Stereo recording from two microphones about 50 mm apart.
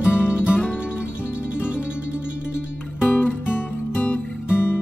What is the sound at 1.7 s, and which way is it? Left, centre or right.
Music, right.